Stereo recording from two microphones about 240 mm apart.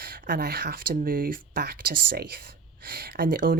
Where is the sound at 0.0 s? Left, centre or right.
Right.